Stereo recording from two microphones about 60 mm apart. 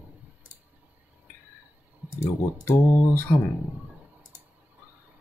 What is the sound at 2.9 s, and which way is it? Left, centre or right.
Speech, left.